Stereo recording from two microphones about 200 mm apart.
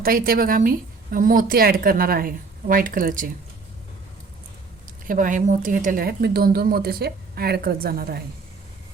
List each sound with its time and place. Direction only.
0.0 s a woman's voice: 45° right (ahead or behind)
5.0 s a woman's voice: 40° right (ahead or behind)